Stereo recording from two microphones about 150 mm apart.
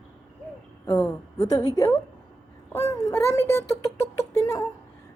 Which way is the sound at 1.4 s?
25° left (ahead or behind).